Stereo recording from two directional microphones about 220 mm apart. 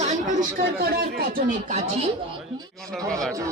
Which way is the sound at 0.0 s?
35° right (ahead or behind).